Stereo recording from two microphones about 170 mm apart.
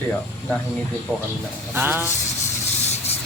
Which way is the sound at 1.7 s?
15° right (ahead or behind).